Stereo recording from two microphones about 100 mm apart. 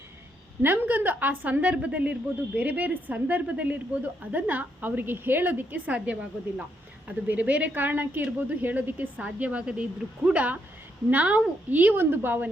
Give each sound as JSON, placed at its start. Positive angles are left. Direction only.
{"t": 0.6, "sound": "a woman's voice", "side_deg": -20}